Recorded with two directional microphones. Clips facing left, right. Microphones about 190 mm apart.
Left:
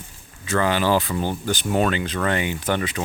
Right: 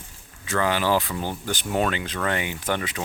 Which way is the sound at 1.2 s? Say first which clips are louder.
Left 5 dB; 15° left (ahead or behind).